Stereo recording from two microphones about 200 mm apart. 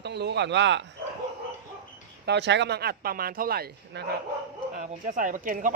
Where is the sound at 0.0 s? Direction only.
55° right (ahead or behind).